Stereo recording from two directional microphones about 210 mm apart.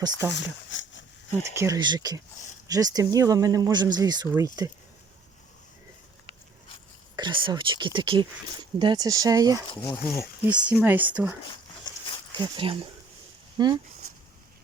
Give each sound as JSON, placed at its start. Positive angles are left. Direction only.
{"t": 0.0, "sound": "speech", "side_deg": -15}
{"t": 0.3, "sound": "speech", "side_deg": 60}
{"t": 1.5, "sound": "speech", "side_deg": -15}
{"t": 7.2, "sound": "speech", "side_deg": -25}
{"t": 9.8, "sound": "speech", "side_deg": 10}
{"t": 10.5, "sound": "speech", "side_deg": -5}
{"t": 11.9, "sound": "a sound", "side_deg": 20}
{"t": 12.4, "sound": "speech", "side_deg": -25}